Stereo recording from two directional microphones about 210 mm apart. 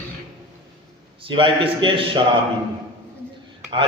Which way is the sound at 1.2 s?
25° right (ahead or behind).